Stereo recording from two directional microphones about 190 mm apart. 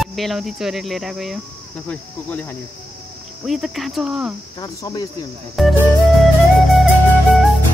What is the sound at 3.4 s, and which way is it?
Speech, centre (ahead or behind).